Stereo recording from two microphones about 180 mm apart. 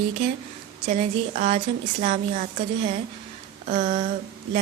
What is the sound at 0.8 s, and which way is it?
A woman's voice, 40° right (ahead or behind).